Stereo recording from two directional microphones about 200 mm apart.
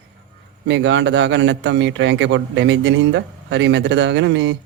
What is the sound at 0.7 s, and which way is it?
A man's voice, 65° right (ahead or behind).